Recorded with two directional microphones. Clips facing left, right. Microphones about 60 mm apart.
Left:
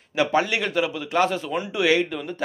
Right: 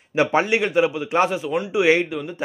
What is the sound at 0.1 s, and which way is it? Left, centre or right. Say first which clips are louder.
Speech: right 3 dB; right.